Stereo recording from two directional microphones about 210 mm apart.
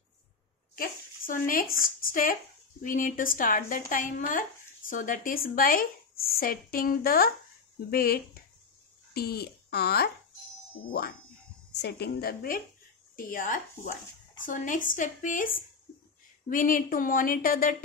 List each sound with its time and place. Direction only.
0.7 s speech: 40° left (ahead or behind)